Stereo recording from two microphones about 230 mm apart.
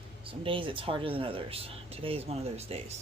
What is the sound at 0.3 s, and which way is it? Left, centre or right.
Speech, right.